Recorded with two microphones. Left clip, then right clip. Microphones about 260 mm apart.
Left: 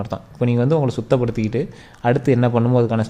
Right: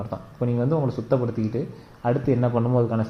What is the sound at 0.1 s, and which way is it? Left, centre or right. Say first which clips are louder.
A man's voice: left 6 dB; left.